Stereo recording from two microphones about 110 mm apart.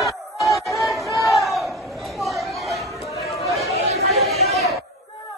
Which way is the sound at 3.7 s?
70° right (ahead or behind).